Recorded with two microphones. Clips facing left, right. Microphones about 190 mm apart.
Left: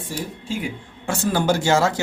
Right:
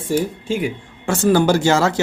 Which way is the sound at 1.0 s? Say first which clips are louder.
Right 6 dB; 80° right.